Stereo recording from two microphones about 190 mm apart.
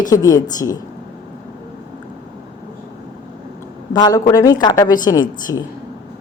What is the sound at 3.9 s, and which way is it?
A woman's voice, 20° left (ahead or behind).